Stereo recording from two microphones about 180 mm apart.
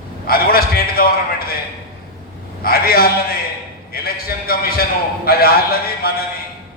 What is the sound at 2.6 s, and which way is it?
A man's voice, 55° left (ahead or behind).